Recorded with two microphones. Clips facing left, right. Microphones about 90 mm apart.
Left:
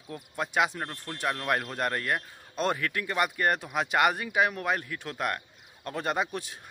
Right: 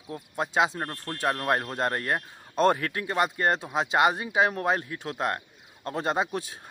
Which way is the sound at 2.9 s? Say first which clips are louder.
Right 2 dB; 25° right (ahead or behind).